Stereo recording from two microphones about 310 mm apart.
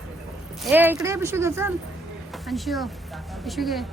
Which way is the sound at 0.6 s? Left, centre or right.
Centre.